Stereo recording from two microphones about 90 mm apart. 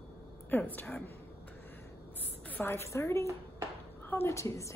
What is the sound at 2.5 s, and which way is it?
A woman's voice, 25° left (ahead or behind).